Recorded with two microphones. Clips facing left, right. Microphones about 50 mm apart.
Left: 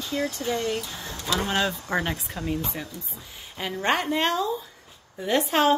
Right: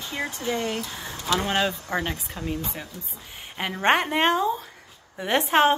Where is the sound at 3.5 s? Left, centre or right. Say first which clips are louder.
Right 3 dB; right.